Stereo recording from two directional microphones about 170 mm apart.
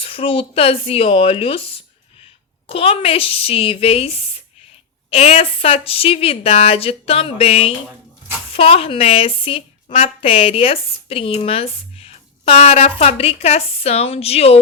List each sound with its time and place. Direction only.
0.0 s a woman's voice: 30° left (ahead or behind)